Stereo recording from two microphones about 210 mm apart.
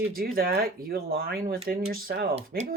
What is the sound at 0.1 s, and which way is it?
Speech, 45° right (ahead or behind).